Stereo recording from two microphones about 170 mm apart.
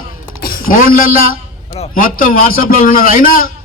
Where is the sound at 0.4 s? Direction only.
55° left (ahead or behind).